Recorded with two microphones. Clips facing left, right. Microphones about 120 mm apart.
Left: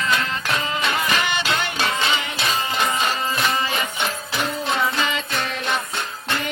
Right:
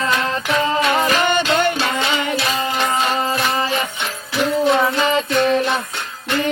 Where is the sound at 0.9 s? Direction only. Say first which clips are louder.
Right 6 dB; 45° right (ahead or behind).